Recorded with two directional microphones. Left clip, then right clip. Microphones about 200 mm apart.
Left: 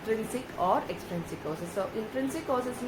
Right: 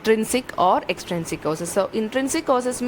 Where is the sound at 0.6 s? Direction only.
55° right (ahead or behind).